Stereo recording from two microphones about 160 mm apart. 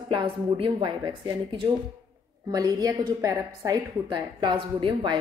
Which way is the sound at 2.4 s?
25° right (ahead or behind).